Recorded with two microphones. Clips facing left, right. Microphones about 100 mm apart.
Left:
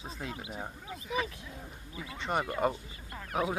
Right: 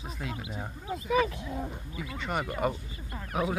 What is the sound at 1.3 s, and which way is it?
Speech, 90° right.